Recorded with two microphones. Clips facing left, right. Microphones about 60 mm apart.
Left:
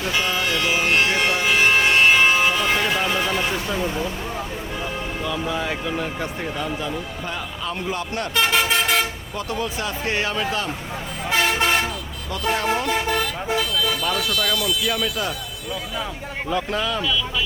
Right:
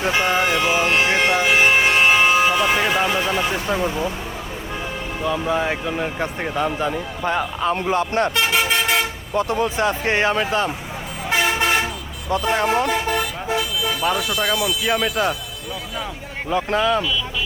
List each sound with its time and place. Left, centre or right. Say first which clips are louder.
0.0 s a sound: right 4 dB; right
5.2 s speech: right 6 dB; right
8.4 s vehicle: even; centre
9.3 s speech: right 10 dB; right
11.3 s toot: right 1 dB; centre
11.5 s toot: right 1 dB; centre
12.5 s speech: right 3 dB; right
13.1 s vehicle: right 1 dB; centre
13.8 s speech: right 2 dB; centre
16.6 s speech: right 6 dB; right